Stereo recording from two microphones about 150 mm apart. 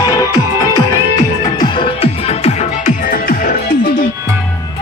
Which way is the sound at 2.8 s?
70° left (ahead or behind).